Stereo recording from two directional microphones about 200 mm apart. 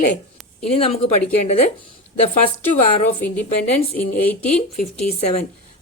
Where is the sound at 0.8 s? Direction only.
30° left (ahead or behind).